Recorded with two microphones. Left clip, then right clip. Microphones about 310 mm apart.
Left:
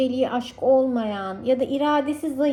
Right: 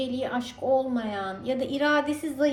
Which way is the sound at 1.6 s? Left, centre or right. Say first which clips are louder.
Left 3 dB; centre.